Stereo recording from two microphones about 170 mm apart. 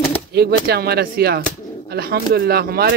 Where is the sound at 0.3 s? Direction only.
70° right (ahead or behind).